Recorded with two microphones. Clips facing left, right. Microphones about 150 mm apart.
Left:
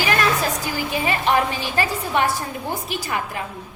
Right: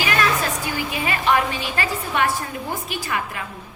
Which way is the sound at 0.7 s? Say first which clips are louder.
Left 2 dB; 35° left (ahead or behind).